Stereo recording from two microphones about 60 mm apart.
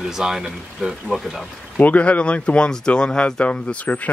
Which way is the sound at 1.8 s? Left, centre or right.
Left.